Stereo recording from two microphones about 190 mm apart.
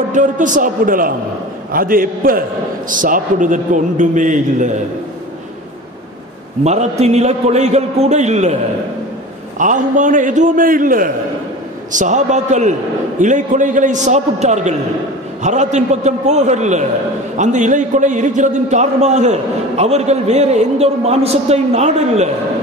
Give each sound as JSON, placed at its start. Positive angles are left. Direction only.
{"t": 0.1, "sound": "a man's voice", "side_deg": -40}
{"t": 6.6, "sound": "a man's voice", "side_deg": -35}
{"t": 9.6, "sound": "a man's voice", "side_deg": -40}